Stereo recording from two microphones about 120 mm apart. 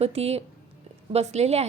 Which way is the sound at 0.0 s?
60° right (ahead or behind).